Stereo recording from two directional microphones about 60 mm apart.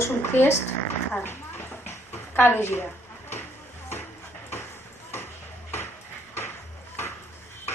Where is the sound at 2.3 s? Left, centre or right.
Left.